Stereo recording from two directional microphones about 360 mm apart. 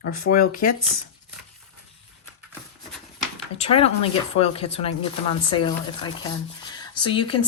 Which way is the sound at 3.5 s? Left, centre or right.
Centre.